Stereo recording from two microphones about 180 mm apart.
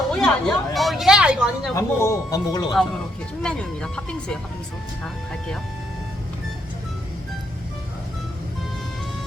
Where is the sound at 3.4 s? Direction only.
5° left (ahead or behind).